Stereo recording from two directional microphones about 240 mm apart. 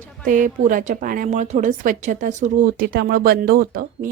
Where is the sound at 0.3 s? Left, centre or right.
Right.